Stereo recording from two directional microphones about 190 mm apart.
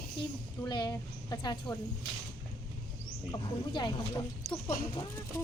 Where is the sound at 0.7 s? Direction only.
20° left (ahead or behind).